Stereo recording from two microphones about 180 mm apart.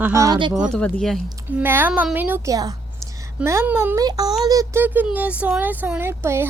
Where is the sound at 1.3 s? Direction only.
20° right (ahead or behind).